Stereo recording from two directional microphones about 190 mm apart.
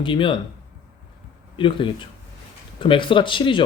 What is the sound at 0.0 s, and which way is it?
Speech, 25° left (ahead or behind).